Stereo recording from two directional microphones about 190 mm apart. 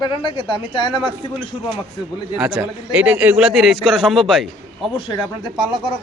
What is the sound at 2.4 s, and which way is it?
A man's voice, 5° right (ahead or behind).